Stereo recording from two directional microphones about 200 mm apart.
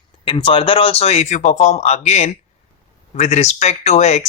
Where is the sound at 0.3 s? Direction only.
25° left (ahead or behind).